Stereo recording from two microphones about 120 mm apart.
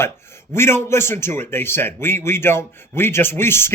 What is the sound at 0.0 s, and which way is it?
Speech, 20° left (ahead or behind).